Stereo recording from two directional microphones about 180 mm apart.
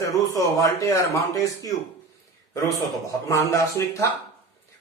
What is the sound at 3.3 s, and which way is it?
Speech, 15° left (ahead or behind).